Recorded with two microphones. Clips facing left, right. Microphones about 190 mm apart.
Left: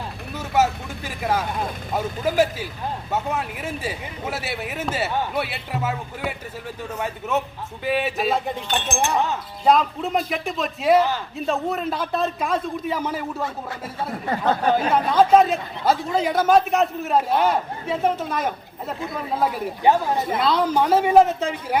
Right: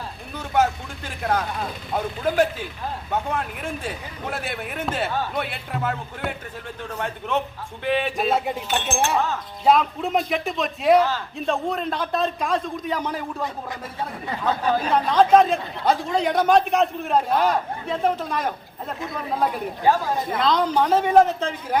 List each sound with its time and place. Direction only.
0.3 s a man's voice: 5° left (ahead or behind)
8.4 s speech: 5° right (ahead or behind)
8.9 s a man's voice: 15° left (ahead or behind)
9.6 s a man's voice: centre (ahead or behind)
14.3 s speech: 50° left (ahead or behind)
14.9 s a man's voice: 5° left (ahead or behind)
19.8 s speech: 20° left (ahead or behind)
20.3 s a man's voice: 5° left (ahead or behind)